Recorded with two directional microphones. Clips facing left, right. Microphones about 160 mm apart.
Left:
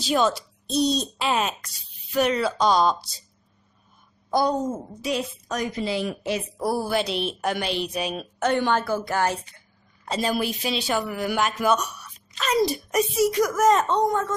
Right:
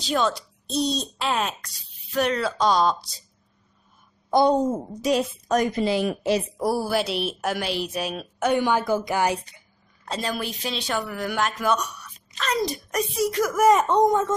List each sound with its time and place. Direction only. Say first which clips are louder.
0.0 s speech: left 2 dB; 5° left (ahead or behind)
4.3 s a woman's voice: right 4 dB; 25° right (ahead or behind)
5.0 s a woman's voice: right 5 dB; 50° right (ahead or behind)
6.6 s a woman's voice: right 1 dB; 10° right (ahead or behind)
10.0 s speech: left 4 dB; 5° left (ahead or behind)
13.6 s a woman's voice: right 4 dB; 10° right (ahead or behind)